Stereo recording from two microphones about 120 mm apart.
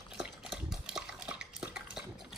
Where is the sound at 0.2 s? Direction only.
5° right (ahead or behind).